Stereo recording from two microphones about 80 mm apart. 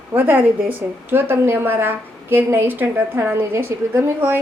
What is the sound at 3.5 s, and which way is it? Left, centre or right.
Speech, right.